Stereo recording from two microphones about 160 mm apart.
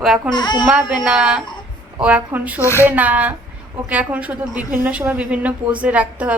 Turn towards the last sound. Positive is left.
turn(degrees=-10)  # may be behind; listen again after turning